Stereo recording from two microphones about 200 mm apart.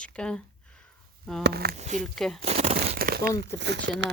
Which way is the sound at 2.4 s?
30° right (ahead or behind).